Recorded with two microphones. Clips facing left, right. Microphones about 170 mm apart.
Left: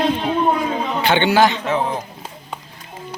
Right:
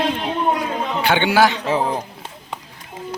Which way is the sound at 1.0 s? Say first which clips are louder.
Left 1 dB; 10° right (ahead or behind).